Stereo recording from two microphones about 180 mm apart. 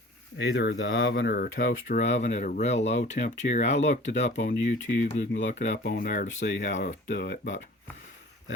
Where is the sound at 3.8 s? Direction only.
80° left.